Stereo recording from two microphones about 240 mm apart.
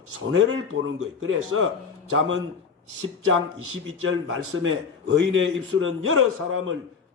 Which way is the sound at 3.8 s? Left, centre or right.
Right.